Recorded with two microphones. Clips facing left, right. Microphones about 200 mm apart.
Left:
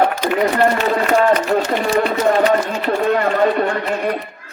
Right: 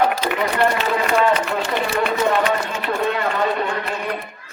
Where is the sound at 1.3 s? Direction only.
45° left (ahead or behind).